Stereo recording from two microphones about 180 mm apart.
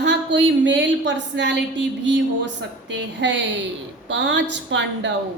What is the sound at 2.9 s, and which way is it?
A woman's voice, 85° right.